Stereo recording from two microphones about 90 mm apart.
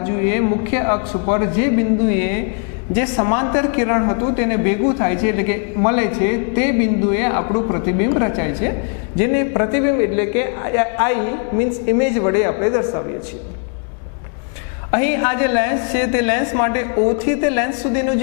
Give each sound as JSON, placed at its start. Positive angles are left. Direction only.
{"t": 0.0, "sound": "a man's voice", "side_deg": 20}
{"t": 14.9, "sound": "a man's voice", "side_deg": 15}